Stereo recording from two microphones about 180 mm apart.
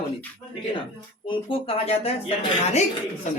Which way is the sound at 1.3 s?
30° left (ahead or behind).